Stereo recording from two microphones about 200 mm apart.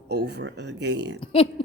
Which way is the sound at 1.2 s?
30° left (ahead or behind).